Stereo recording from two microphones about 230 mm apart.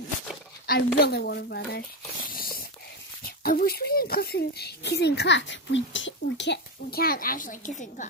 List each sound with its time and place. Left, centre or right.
0.7 s a woman's voice: left
2.3 s a sound: left
3.4 s a woman's voice: left